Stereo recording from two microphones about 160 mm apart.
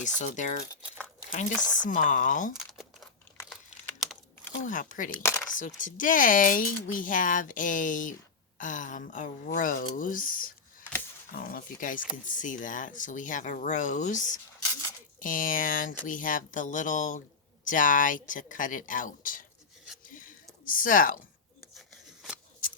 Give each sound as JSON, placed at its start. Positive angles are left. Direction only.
{"t": 0.0, "sound": "speech", "side_deg": 50}
{"t": 2.6, "sound": "crumpling", "side_deg": 0}
{"t": 4.6, "sound": "speech", "side_deg": 55}
{"t": 5.1, "sound": "speech", "side_deg": 15}
{"t": 5.5, "sound": "speech", "side_deg": 55}
{"t": 20.1, "sound": "a sound", "side_deg": 60}
{"t": 21.8, "sound": "a sound", "side_deg": -5}